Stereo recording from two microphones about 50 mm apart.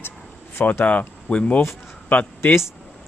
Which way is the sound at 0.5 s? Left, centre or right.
Left.